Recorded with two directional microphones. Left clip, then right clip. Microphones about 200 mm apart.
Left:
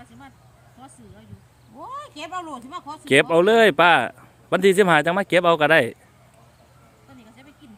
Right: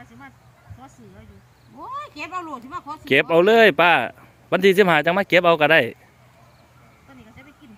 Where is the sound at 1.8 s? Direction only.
30° left (ahead or behind).